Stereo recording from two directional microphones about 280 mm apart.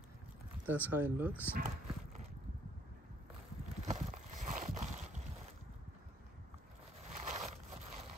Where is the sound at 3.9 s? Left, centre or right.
Right.